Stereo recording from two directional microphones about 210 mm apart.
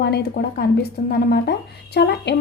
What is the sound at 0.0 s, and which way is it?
Speech, 50° left (ahead or behind).